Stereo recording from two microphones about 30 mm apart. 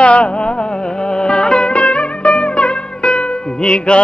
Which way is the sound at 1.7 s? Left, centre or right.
Left.